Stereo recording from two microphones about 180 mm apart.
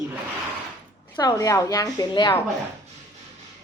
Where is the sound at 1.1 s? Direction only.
25° left (ahead or behind).